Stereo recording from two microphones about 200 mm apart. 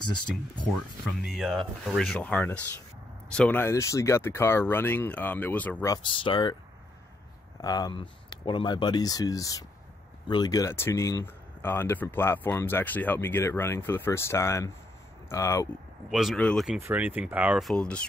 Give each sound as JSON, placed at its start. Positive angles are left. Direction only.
{"t": 1.2, "sound": "speech", "side_deg": 0}
{"t": 6.0, "sound": "speech", "side_deg": 25}
{"t": 7.6, "sound": "speech", "side_deg": 20}
{"t": 16.1, "sound": "speech", "side_deg": 0}